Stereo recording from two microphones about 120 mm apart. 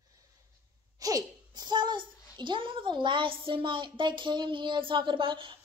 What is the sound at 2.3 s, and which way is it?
A woman's voice, 40° right (ahead or behind).